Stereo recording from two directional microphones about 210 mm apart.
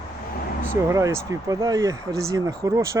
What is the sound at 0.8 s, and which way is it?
Speech, 15° right (ahead or behind).